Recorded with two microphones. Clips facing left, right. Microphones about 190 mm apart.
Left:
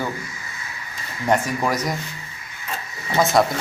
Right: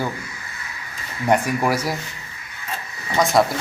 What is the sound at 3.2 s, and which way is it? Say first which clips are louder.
Speech: even; centre (ahead or behind).